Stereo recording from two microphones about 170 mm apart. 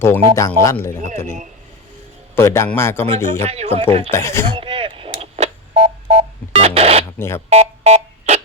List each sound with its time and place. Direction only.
0.0 s speech: 15° left (ahead or behind)
3.2 s speech: 45° right (ahead or behind)
4.1 s speech: 15° left (ahead or behind)
4.4 s speech: 30° right (ahead or behind)
6.1 s a sound: 40° right (ahead or behind)
7.2 s speech: 15° left (ahead or behind)
7.5 s alarm: 40° right (ahead or behind)